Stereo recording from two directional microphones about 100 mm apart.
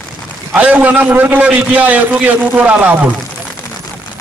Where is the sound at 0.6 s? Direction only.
15° right (ahead or behind).